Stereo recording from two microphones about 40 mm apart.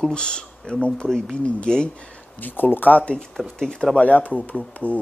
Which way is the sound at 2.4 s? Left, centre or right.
Left.